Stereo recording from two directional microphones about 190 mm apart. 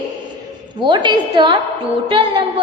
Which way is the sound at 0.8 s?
25° right (ahead or behind).